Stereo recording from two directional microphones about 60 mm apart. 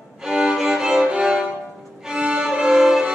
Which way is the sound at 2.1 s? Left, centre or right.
Centre.